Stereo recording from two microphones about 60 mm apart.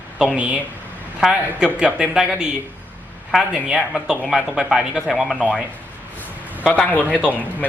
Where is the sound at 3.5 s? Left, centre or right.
Centre.